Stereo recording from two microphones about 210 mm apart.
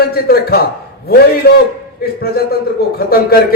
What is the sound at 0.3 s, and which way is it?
A man's voice, 50° left (ahead or behind).